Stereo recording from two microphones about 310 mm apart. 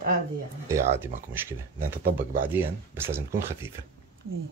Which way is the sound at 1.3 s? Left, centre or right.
Centre.